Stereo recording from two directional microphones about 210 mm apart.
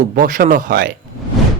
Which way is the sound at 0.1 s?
40° right (ahead or behind).